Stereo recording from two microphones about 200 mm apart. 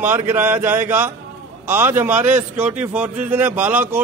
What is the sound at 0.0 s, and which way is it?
A man's voice, 10° right (ahead or behind).